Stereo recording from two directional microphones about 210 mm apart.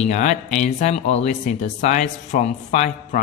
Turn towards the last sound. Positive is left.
turn(degrees=35)  # may be behind; listen again after turning